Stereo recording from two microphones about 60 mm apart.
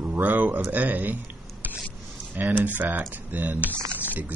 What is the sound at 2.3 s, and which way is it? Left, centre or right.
Speech, right.